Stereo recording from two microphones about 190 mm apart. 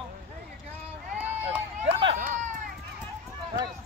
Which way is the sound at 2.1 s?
45° right (ahead or behind).